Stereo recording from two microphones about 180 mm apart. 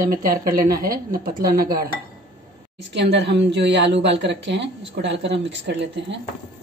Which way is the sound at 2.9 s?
75° right (ahead or behind).